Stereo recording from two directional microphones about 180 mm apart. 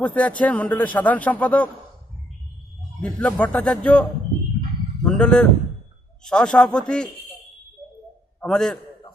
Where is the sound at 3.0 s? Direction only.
5° left (ahead or behind).